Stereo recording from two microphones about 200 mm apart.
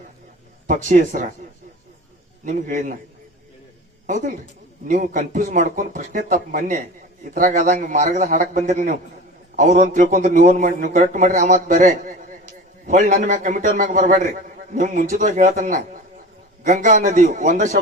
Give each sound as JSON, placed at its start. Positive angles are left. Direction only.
{"t": 0.7, "sound": "a man's voice", "side_deg": -40}
{"t": 2.4, "sound": "a man's voice", "side_deg": -40}
{"t": 4.0, "sound": "a man's voice", "side_deg": -40}